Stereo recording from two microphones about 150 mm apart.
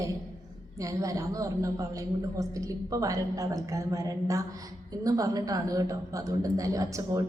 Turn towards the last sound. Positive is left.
turn(degrees=-20)  # may be behind; listen again after turning